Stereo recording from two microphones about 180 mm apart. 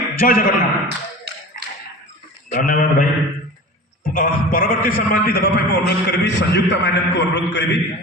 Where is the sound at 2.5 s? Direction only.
50° left (ahead or behind).